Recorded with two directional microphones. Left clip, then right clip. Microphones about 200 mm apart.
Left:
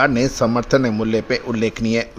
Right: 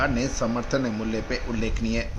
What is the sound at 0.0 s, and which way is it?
A man's voice, 45° left (ahead or behind).